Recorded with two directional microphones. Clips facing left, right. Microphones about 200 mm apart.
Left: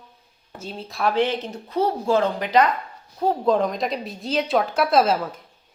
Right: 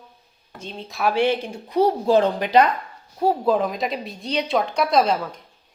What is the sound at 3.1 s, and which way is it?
Speech, 10° right (ahead or behind).